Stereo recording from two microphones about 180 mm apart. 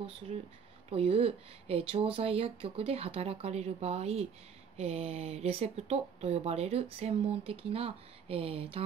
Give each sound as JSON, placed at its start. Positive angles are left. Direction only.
{"t": 0.0, "sound": "speech", "side_deg": -35}